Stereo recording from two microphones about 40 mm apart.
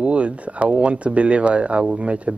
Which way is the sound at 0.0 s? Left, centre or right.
Right.